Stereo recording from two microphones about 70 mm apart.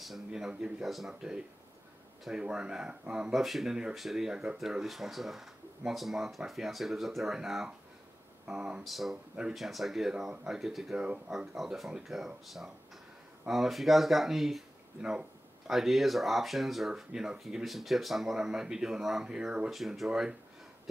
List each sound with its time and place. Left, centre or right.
0.0 s speech: centre
11.0 s speech: centre
11.3 s speech: centre
15.0 s a sound: centre
15.8 s speech: centre